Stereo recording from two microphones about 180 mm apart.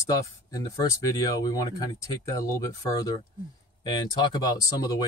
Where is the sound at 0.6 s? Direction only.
20° left (ahead or behind).